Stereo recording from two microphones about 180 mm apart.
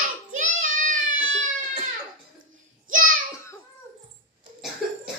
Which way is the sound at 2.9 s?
50° right (ahead or behind).